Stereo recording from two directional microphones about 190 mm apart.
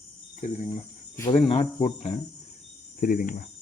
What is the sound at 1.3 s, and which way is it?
Speech, 30° left (ahead or behind).